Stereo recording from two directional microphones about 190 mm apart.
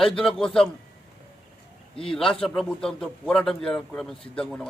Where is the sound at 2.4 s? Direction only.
Centre (ahead or behind).